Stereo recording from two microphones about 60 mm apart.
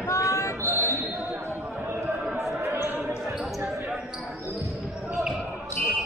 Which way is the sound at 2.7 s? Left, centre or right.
Right.